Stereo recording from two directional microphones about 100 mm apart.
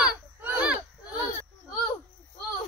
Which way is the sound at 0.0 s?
15° right (ahead or behind).